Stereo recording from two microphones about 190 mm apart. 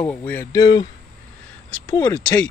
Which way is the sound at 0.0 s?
10° left (ahead or behind).